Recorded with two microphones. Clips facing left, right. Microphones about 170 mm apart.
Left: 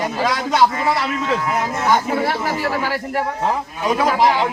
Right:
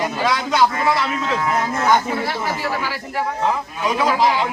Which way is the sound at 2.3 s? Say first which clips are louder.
Left 2 dB; 60° left (ahead or behind).